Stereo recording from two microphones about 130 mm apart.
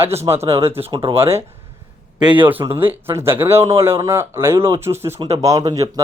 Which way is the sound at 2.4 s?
15° right (ahead or behind).